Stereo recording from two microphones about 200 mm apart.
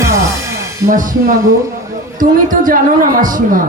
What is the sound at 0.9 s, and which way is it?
A man's voice, 40° right (ahead or behind).